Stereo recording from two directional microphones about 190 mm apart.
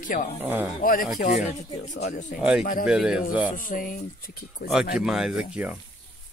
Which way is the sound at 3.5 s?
45° left (ahead or behind).